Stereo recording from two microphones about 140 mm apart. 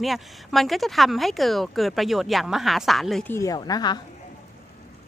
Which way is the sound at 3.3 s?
20° left (ahead or behind).